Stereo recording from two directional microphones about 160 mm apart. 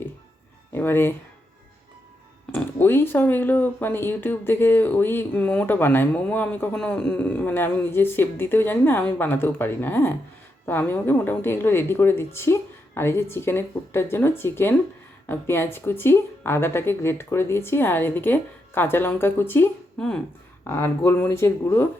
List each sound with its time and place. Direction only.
0.7 s speech: 15° left (ahead or behind)
2.5 s speech: 15° left (ahead or behind)